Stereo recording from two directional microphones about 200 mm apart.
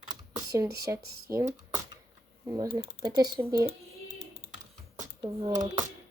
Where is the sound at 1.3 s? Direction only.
15° right (ahead or behind).